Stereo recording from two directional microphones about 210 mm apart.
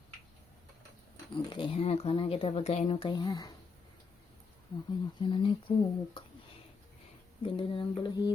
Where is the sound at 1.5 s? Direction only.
25° left (ahead or behind).